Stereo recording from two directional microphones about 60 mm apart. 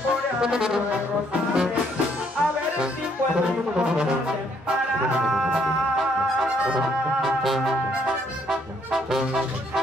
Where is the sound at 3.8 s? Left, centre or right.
Centre.